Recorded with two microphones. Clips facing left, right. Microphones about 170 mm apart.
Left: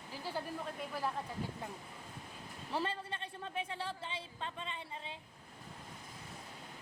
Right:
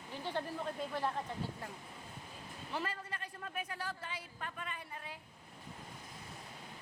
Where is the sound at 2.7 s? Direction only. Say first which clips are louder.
Left 3 dB; 30° left (ahead or behind).